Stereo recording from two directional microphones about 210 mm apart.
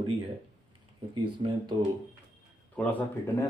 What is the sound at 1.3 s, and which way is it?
Speech, 20° right (ahead or behind).